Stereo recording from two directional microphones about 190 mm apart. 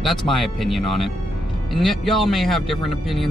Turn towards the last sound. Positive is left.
turn(degrees=0)  # may be behind; listen again after turning